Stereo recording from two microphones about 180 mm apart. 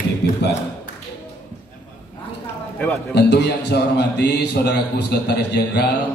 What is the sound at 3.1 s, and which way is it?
A man's voice, 70° left (ahead or behind).